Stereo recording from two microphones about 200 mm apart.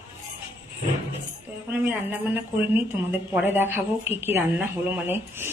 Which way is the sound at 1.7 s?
10° right (ahead or behind).